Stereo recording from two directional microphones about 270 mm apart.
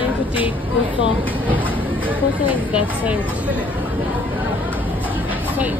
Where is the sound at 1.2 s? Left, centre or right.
Centre.